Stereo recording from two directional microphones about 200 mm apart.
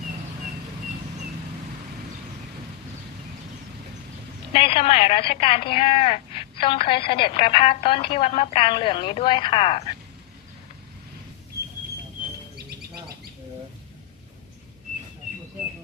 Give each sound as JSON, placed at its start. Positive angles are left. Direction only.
{"t": 4.5, "sound": "speech", "side_deg": 30}